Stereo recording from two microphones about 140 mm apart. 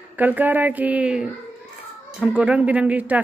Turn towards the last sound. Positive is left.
turn(degrees=-10)  # may be behind; listen again after turning